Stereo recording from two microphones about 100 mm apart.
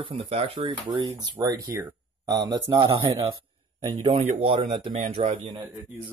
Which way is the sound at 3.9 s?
60° right (ahead or behind).